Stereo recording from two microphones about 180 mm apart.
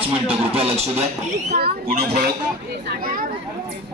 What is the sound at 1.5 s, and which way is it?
Speech, 60° right (ahead or behind).